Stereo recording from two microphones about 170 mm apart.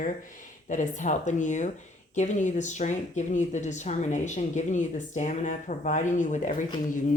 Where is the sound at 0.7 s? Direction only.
45° left (ahead or behind).